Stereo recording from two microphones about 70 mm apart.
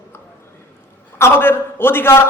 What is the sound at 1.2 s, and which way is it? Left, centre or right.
A man's voice, left.